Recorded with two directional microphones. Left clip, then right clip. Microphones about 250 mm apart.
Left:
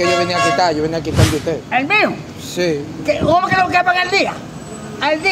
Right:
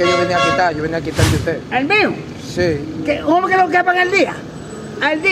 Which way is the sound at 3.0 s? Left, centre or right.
Left.